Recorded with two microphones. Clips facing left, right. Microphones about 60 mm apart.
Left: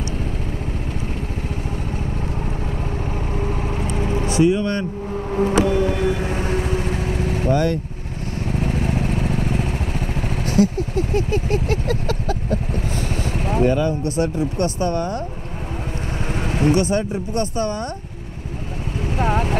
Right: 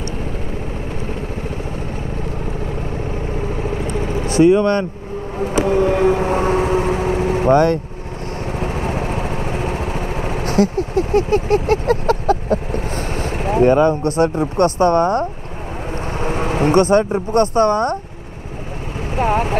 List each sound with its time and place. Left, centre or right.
4.4 s speech: right
8.5 s vehicle: right
16.3 s speech: right
19.1 s speech: right